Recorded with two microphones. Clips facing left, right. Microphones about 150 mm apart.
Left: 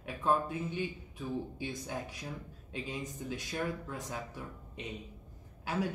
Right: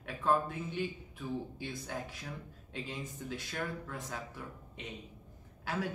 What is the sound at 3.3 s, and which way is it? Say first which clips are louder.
Speech: left 3 dB; 15° left (ahead or behind).